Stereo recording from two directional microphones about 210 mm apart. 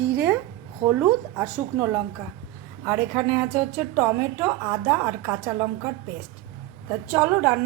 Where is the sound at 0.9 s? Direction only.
10° right (ahead or behind).